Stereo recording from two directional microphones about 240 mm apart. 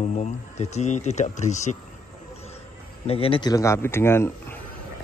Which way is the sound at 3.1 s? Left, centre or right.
Left.